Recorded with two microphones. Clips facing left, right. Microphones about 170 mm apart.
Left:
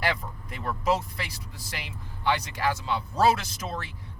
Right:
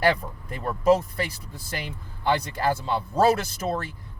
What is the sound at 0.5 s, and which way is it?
Speech, 45° right (ahead or behind).